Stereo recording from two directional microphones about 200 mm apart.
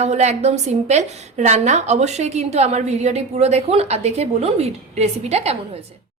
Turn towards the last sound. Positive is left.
turn(degrees=-30)  # may be behind; listen again after turning